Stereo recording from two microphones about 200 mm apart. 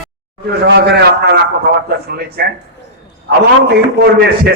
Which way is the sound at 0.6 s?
55° right (ahead or behind).